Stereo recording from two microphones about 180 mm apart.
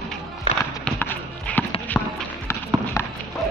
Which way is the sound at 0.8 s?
10° left (ahead or behind).